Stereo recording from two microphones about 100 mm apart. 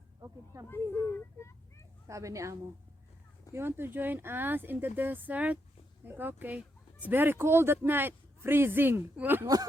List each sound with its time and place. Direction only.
0.7 s speech: 25° left (ahead or behind)
2.0 s speech: 30° right (ahead or behind)